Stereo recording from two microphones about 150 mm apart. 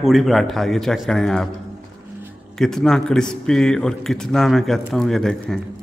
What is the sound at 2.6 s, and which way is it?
A man's voice, 5° left (ahead or behind).